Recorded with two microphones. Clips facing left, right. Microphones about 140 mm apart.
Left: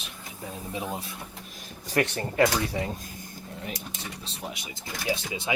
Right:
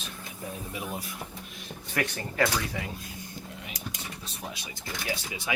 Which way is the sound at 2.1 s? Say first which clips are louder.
Left 3 dB; 25° left (ahead or behind).